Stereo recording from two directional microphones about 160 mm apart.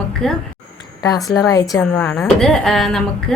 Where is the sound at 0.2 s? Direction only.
Centre (ahead or behind).